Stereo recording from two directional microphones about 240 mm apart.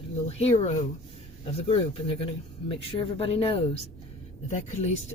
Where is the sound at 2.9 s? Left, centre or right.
Left.